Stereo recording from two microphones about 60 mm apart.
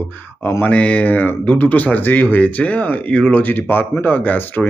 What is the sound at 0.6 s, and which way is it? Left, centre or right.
Speech, left.